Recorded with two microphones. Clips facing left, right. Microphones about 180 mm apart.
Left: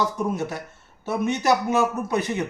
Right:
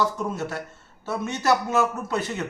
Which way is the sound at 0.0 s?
15° left (ahead or behind).